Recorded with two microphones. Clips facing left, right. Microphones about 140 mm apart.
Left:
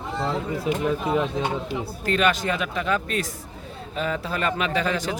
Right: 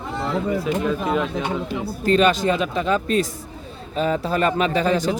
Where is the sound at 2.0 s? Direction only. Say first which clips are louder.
Right 5 dB; 30° right (ahead or behind).